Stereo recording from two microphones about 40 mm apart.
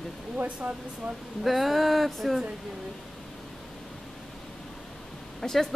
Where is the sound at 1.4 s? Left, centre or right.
Centre.